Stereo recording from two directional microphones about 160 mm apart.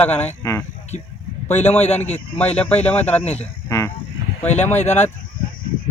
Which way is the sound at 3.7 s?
20° left (ahead or behind).